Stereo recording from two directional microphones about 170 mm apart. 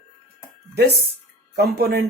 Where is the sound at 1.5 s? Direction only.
65° right (ahead or behind).